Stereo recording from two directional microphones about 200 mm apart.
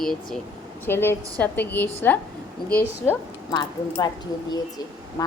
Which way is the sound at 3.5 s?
20° left (ahead or behind).